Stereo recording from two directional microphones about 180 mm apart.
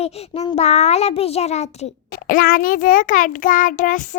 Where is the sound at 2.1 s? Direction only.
50° left (ahead or behind).